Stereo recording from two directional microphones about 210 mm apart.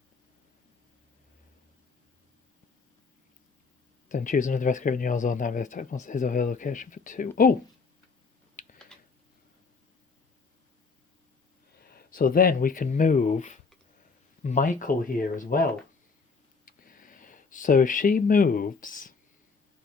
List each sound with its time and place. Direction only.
4.1 s speech: 40° left (ahead or behind)
8.9 s a sound: 5° left (ahead or behind)
11.8 s speech: 45° left (ahead or behind)
16.6 s speech: 40° left (ahead or behind)